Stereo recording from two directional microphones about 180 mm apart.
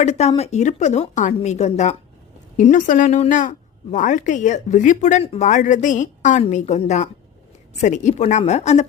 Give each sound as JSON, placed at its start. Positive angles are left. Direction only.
{"t": 0.0, "sound": "a woman's voice", "side_deg": 40}